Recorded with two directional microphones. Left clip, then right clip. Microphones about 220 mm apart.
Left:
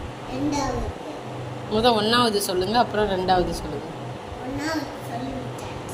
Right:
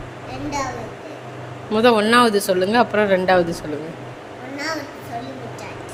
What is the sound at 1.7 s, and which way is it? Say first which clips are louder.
Speech: right 5 dB; 40° right (ahead or behind).